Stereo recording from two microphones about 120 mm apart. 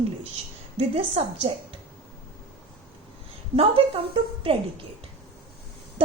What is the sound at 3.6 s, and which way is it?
Speech, 50° right (ahead or behind).